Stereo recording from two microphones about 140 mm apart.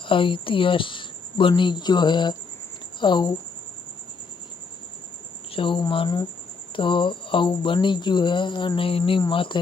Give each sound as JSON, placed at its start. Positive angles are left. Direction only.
{"t": 0.0, "sound": "speech", "side_deg": 35}
{"t": 5.5, "sound": "speech", "side_deg": 35}